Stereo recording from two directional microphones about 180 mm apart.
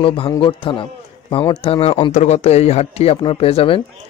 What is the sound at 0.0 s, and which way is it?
A man's voice, 30° left (ahead or behind).